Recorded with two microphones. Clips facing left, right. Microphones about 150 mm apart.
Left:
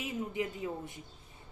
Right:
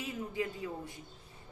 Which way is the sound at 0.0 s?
20° left (ahead or behind).